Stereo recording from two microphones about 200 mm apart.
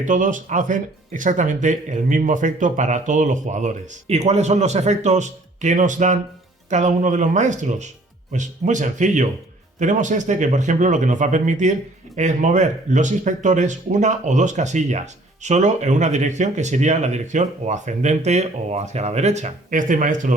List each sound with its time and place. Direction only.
0.0 s speech: 40° right (ahead or behind)